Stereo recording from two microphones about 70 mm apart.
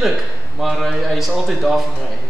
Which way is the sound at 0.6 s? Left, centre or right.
Centre.